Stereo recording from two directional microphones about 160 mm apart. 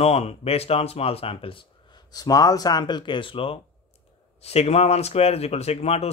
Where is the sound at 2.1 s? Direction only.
25° left (ahead or behind).